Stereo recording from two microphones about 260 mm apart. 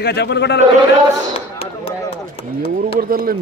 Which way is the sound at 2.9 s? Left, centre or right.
Right.